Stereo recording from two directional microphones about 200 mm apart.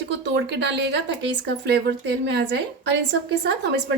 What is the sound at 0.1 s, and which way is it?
A woman's voice, 60° right (ahead or behind).